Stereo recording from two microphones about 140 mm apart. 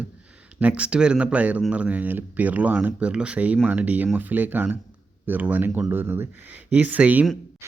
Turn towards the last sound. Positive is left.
turn(degrees=-10)  # may be behind; listen again after turning